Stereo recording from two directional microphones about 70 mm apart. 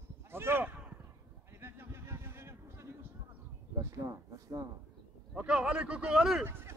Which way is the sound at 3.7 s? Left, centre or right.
Right.